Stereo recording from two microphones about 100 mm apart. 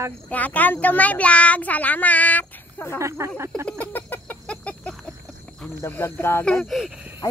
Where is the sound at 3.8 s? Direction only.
15° left (ahead or behind).